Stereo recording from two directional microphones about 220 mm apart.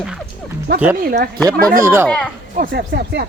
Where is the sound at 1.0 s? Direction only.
45° right (ahead or behind).